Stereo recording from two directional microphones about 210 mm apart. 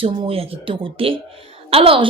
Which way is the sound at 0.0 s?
25° right (ahead or behind).